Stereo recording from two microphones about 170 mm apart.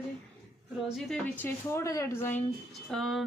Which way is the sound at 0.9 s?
Centre (ahead or behind).